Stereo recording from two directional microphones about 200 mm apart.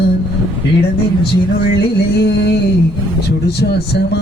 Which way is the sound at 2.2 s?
55° left (ahead or behind).